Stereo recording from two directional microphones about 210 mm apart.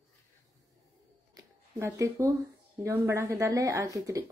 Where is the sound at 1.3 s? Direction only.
15° right (ahead or behind).